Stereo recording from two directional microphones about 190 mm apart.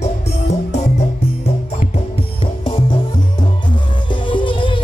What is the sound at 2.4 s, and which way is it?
Music, 25° left (ahead or behind).